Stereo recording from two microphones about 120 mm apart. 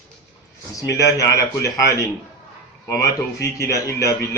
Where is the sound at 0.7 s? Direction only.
25° left (ahead or behind).